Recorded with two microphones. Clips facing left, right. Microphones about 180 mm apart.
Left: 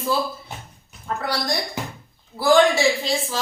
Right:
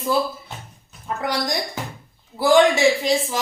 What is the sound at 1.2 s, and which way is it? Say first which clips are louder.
A woman's voice: right 2 dB; 15° right (ahead or behind).